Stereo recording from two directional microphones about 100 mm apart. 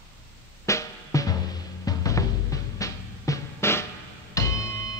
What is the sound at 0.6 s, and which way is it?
Drum, 30° left (ahead or behind).